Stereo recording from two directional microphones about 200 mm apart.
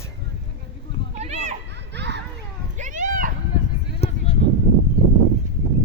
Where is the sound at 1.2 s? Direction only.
35° right (ahead or behind).